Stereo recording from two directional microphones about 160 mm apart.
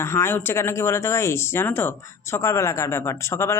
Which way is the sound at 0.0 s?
15° left (ahead or behind).